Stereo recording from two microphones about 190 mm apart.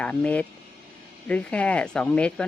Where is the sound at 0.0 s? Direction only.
5° left (ahead or behind).